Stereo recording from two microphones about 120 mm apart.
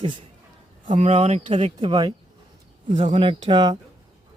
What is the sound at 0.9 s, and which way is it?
Speech, 90° right.